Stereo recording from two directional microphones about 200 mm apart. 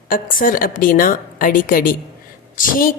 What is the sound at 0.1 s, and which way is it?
A woman's voice, 45° left (ahead or behind).